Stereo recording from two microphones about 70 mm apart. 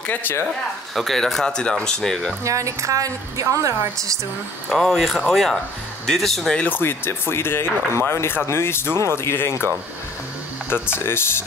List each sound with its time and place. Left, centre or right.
0.0 s speech: left
0.9 s speech: centre
2.4 s a woman's voice: right
4.6 s speech: centre
6.7 s speech: left
10.7 s speech: left